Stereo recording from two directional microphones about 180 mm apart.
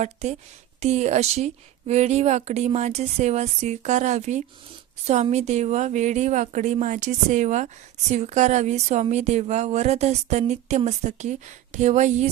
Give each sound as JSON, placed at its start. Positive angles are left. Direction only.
{"t": 0.0, "sound": "speech", "side_deg": -40}